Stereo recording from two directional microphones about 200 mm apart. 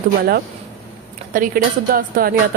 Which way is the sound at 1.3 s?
45° right (ahead or behind).